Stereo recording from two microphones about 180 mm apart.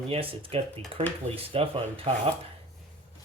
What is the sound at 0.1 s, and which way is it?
Speech, 30° right (ahead or behind).